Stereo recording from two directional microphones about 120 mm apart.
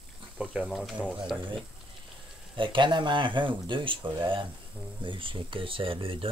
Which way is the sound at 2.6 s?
45° right (ahead or behind).